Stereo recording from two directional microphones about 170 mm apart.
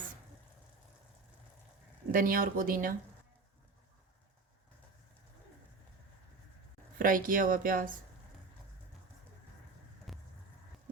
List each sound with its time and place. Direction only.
2.1 s speech: 55° right (ahead or behind)
7.0 s speech: 55° right (ahead or behind)
10.1 s vehicle: centre (ahead or behind)